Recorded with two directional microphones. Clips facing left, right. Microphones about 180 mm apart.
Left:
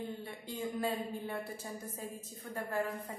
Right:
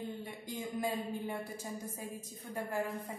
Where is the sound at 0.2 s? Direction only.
15° right (ahead or behind).